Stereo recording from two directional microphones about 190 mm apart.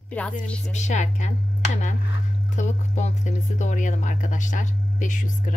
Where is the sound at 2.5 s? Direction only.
40° left (ahead or behind).